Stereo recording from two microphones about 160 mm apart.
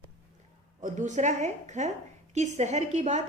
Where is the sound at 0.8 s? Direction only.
50° right (ahead or behind).